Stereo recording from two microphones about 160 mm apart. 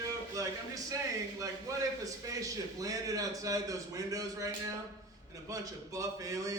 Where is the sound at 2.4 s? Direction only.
20° right (ahead or behind).